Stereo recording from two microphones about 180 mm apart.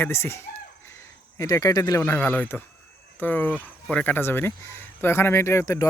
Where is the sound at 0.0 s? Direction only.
15° left (ahead or behind).